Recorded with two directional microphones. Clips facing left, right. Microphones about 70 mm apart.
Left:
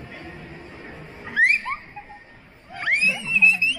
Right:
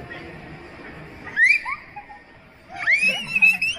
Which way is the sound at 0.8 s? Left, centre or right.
Right.